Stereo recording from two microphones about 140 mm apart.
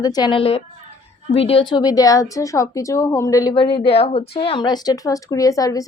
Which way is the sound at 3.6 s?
40° left (ahead or behind).